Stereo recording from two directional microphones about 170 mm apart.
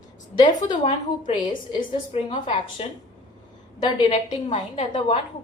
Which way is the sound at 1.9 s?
30° left (ahead or behind).